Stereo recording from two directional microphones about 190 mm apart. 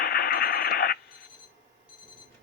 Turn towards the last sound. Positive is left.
turn(degrees=55)  # may be behind; listen again after turning